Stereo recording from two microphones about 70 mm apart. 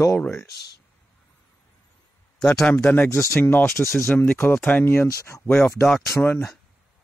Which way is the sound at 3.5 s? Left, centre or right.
Left.